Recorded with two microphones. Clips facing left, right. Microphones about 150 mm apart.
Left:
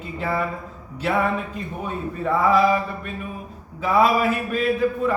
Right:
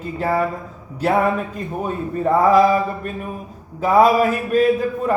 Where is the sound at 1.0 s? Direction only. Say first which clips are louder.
Right 4 dB; 45° right (ahead or behind).